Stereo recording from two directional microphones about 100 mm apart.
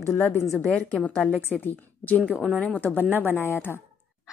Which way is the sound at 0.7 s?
15° left (ahead or behind).